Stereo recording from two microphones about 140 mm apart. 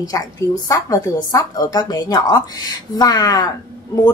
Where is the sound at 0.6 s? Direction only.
25° left (ahead or behind).